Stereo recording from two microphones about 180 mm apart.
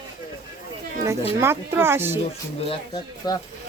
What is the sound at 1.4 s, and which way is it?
Speech, 15° right (ahead or behind).